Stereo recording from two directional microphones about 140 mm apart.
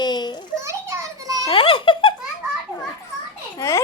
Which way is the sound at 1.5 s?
40° left (ahead or behind).